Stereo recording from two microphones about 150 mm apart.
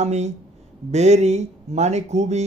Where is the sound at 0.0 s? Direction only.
50° right (ahead or behind).